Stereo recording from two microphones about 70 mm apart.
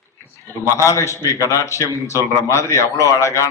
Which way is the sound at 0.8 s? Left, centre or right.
Left.